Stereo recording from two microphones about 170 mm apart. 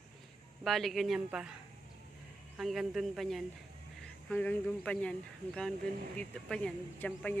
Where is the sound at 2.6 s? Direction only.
Centre (ahead or behind).